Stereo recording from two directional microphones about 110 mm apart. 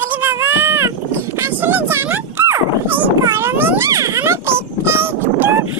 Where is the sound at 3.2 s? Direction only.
25° right (ahead or behind).